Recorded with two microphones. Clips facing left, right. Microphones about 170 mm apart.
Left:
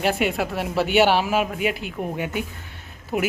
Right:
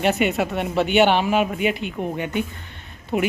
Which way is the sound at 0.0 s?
Centre (ahead or behind).